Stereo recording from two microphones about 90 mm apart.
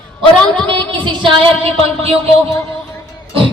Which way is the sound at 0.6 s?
65° right (ahead or behind).